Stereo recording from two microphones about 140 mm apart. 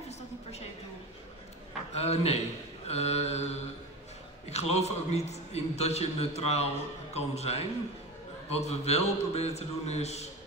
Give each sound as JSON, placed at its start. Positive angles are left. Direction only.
{"t": 2.0, "sound": "a man's voice", "side_deg": 50}
{"t": 4.5, "sound": "a man's voice", "side_deg": 50}